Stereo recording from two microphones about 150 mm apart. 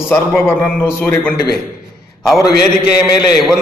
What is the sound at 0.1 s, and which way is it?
A man's voice, 15° left (ahead or behind).